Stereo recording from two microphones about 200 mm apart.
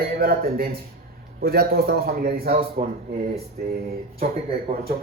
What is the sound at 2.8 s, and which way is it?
Speech, 40° right (ahead or behind).